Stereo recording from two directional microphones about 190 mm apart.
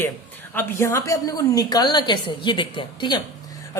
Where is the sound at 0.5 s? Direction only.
10° left (ahead or behind).